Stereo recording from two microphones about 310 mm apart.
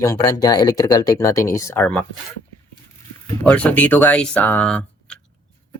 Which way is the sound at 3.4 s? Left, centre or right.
Centre.